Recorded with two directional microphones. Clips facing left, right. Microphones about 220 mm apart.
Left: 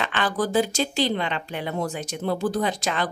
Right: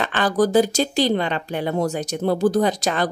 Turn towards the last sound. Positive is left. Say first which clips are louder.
# right 5 dB
turn(degrees=-40)  # may be behind; listen again after turning